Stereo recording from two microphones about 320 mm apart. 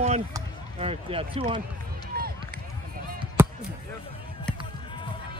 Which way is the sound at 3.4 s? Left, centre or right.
Centre.